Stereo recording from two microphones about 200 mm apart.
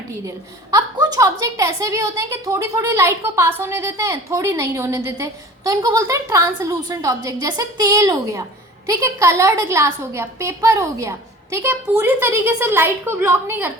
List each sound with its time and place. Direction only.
0.7 s a woman's voice: 20° right (ahead or behind)